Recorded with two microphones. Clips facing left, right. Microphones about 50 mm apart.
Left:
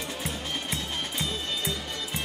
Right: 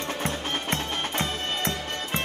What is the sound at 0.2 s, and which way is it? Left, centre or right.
Music, right.